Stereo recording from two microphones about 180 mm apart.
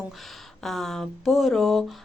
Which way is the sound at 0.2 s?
Centre (ahead or behind).